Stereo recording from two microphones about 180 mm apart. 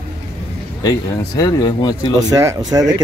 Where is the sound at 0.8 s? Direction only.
20° left (ahead or behind).